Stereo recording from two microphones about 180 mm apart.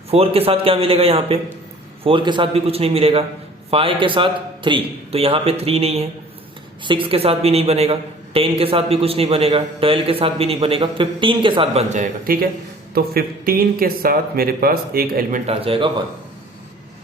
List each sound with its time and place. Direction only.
0.1 s a woman's voice: 30° right (ahead or behind); by 15.4 s 55° right (ahead or behind)
15.4 s a woman's voice: 30° right (ahead or behind)